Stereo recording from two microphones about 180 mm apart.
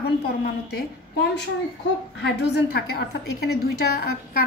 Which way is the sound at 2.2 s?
65° left (ahead or behind).